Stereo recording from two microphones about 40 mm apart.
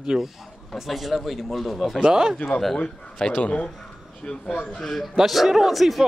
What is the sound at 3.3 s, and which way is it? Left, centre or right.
Speech, left.